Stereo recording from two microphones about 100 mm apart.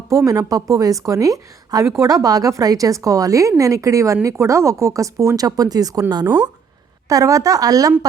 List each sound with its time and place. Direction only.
0.3 s speech: 35° right (ahead or behind)